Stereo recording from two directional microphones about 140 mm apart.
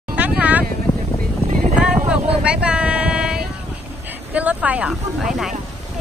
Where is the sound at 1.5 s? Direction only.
65° right (ahead or behind).